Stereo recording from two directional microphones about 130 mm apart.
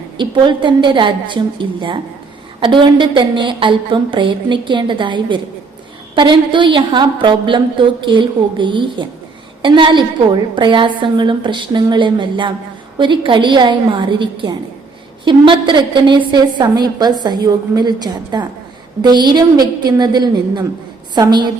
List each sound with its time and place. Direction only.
0.2 s a woman's voice: 40° right (ahead or behind)